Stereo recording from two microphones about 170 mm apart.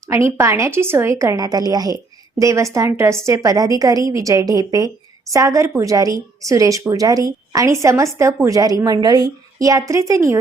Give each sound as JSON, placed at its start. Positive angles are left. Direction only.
{"t": 0.1, "sound": "a woman's voice", "side_deg": -15}